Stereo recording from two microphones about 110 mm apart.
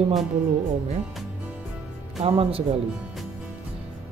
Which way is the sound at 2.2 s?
60° right (ahead or behind).